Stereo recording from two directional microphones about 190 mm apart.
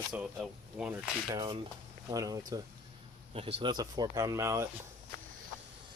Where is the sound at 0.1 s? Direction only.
5° right (ahead or behind).